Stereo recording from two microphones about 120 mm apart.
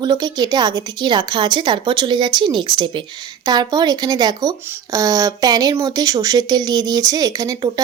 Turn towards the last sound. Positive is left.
turn(degrees=-30)  # may be behind; listen again after turning